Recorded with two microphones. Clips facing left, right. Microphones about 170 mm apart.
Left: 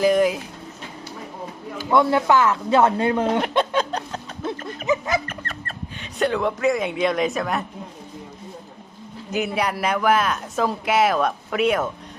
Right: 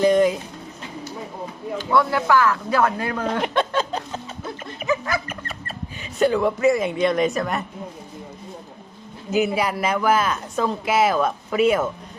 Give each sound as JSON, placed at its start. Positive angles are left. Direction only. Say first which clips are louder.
{"t": 0.0, "sound": "pigeon", "louder": "right 1 dB", "side_deg": 5}
{"t": 1.9, "sound": "speech", "louder": "left 2 dB", "side_deg": 20}
{"t": 3.8, "sound": "a sound", "louder": "left 1 dB", "side_deg": 0}
{"t": 4.9, "sound": "a sound", "louder": "left 2 dB", "side_deg": 20}
{"t": 5.3, "sound": "speech", "louder": "even", "side_deg": -5}
{"t": 9.3, "sound": "speech", "louder": "right 3 dB", "side_deg": 0}